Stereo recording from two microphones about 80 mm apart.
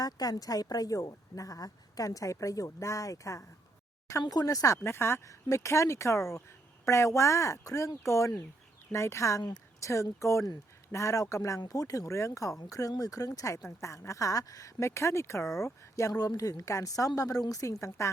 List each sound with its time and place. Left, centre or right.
0.0 s speech: left
4.2 s speech: left
4.8 s speech: left